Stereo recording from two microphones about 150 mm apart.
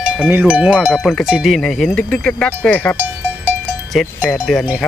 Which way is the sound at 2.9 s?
15° right (ahead or behind).